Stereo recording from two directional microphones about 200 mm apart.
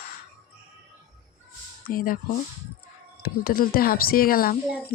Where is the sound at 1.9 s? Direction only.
45° left (ahead or behind).